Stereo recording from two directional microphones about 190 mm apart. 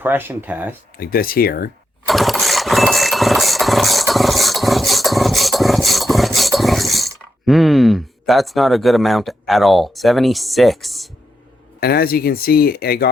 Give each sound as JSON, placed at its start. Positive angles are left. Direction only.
{"t": 0.0, "sound": "speech", "side_deg": -10}
{"t": 0.9, "sound": "speech", "side_deg": 50}
{"t": 2.0, "sound": "engine", "side_deg": 0}
{"t": 11.8, "sound": "speech", "side_deg": 55}